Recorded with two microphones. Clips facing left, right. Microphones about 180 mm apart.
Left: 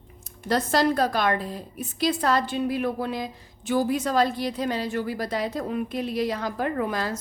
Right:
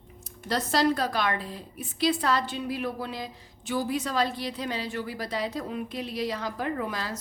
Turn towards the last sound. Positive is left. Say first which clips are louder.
# left 4 dB
turn(degrees=50)  # may be behind; listen again after turning